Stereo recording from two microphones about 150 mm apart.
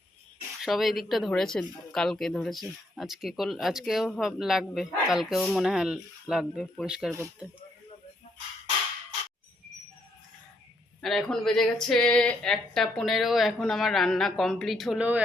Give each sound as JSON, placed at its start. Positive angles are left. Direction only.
{"t": 0.6, "sound": "speech", "side_deg": 0}
{"t": 11.0, "sound": "speech", "side_deg": 0}